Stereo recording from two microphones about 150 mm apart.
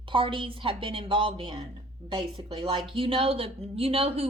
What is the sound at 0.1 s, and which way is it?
A woman's voice, 35° right (ahead or behind).